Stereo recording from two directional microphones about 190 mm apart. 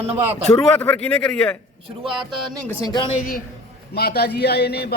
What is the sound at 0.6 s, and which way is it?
Speech, 5° left (ahead or behind).